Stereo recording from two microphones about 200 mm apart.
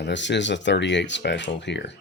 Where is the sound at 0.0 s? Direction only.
60° left (ahead or behind).